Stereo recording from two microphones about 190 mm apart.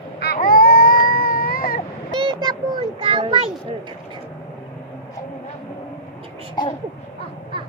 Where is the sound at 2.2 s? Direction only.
20° right (ahead or behind).